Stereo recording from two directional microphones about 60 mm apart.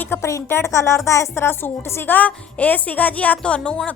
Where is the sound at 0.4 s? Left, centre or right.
Left.